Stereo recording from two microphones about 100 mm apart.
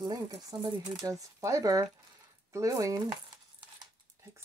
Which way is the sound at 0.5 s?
50° right (ahead or behind).